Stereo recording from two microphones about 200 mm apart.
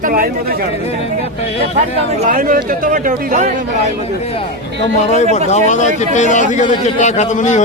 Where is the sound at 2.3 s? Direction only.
45° right (ahead or behind).